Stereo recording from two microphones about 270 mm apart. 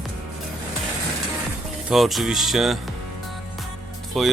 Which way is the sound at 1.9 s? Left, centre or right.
Centre.